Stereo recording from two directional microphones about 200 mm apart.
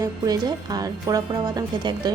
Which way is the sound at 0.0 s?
20° right (ahead or behind).